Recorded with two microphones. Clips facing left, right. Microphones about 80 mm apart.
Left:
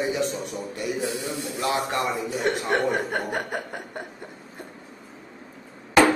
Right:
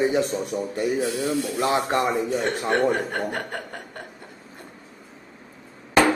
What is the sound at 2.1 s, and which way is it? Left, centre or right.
Speech, centre.